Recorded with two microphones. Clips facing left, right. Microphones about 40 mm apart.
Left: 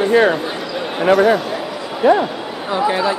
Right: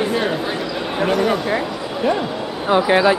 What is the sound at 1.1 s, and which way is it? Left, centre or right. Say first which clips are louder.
Speech: left 7 dB; centre.